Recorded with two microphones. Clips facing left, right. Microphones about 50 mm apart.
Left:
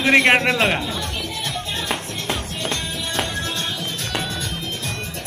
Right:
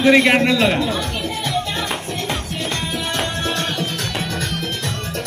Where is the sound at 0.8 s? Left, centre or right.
Right.